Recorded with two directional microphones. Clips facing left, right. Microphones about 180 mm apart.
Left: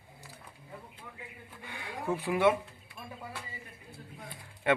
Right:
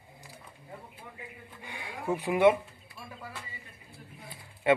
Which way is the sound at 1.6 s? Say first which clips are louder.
Right 1 dB; 10° right (ahead or behind).